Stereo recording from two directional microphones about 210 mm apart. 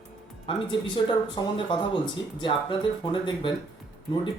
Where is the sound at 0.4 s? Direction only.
25° left (ahead or behind).